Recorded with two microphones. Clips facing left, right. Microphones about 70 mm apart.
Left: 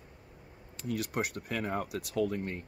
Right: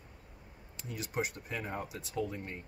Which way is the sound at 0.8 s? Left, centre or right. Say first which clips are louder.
Left 3 dB; left.